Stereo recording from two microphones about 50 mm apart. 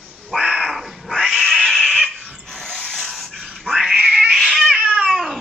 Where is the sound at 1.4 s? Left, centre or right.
Centre.